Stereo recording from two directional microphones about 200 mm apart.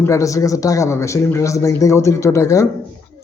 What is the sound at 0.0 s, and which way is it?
A man's voice, 15° left (ahead or behind).